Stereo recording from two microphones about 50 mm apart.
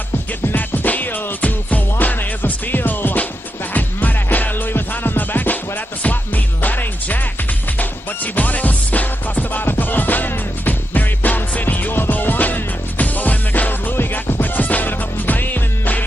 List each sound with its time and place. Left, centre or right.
0.5 s music: left
8.2 s music: left